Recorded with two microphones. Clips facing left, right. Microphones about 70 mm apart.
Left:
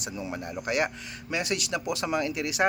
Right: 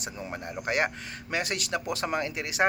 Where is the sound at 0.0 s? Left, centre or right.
Right.